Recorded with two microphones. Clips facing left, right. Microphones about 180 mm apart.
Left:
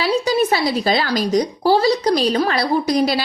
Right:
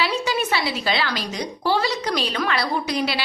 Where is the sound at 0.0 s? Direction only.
35° left (ahead or behind).